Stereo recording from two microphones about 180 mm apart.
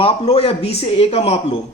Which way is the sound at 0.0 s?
35° left (ahead or behind).